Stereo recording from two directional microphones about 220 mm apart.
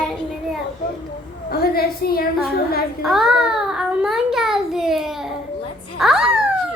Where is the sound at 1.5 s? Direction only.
45° left (ahead or behind).